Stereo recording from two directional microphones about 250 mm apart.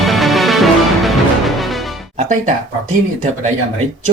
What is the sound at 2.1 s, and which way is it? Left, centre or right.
Speech, right.